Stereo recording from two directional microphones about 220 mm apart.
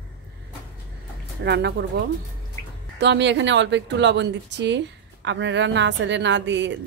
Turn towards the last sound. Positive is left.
turn(degrees=-55)  # may be behind; listen again after turning